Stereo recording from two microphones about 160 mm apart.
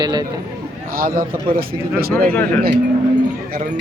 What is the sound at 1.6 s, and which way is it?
Mantra, 70° right (ahead or behind).